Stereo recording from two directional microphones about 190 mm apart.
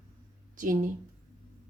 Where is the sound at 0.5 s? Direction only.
45° right (ahead or behind).